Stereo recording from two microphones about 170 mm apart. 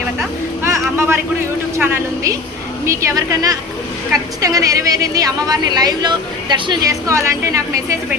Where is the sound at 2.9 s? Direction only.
20° right (ahead or behind).